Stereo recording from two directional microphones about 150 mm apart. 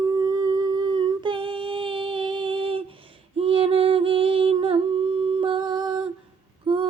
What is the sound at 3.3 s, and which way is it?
Humming, 40° right (ahead or behind).